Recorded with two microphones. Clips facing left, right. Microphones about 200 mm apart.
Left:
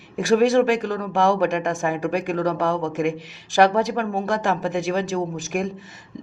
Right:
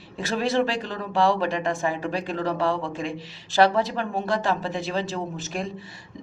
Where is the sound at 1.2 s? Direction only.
15° left (ahead or behind).